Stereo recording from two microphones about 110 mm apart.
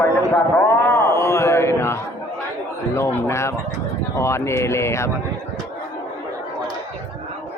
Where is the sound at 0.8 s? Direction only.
25° left (ahead or behind).